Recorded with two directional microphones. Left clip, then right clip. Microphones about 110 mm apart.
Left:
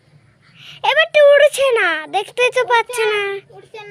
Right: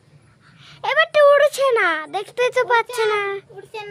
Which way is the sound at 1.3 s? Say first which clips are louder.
Left 3 dB; 15° left (ahead or behind).